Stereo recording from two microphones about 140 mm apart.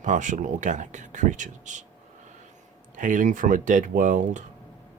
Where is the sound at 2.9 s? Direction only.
65° right (ahead or behind).